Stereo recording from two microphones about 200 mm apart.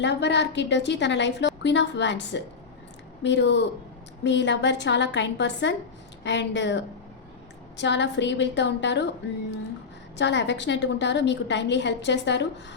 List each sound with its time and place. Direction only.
0.0 s a woman's voice: 60° left (ahead or behind)
10.2 s a woman's voice: 60° left (ahead or behind)